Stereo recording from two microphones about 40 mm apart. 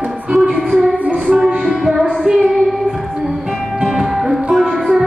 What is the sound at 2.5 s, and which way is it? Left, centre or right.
Child singing, centre.